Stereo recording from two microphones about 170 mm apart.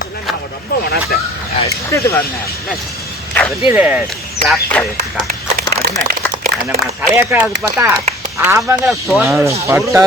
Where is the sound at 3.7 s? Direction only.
10° right (ahead or behind).